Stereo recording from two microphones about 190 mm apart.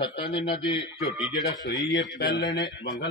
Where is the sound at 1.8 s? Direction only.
65° left (ahead or behind).